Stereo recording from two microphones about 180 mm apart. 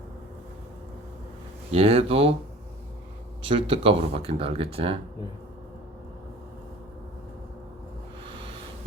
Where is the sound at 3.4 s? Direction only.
30° right (ahead or behind).